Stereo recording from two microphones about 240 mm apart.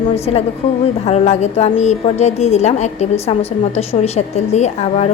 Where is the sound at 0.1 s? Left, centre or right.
Left.